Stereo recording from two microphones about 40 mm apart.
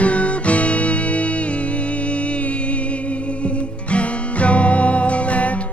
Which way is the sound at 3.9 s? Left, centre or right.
Left.